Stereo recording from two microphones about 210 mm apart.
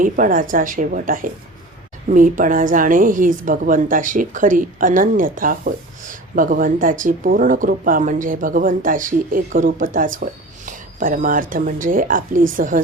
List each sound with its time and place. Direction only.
0.0 s a woman's voice: 40° right (ahead or behind)